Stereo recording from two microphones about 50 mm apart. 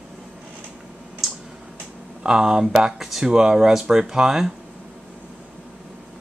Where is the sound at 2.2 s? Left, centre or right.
Centre.